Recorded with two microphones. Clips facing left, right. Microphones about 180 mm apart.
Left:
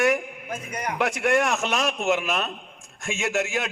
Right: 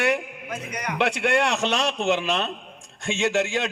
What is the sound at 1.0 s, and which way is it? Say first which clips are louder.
Speech: right 1 dB; 65° right (ahead or behind).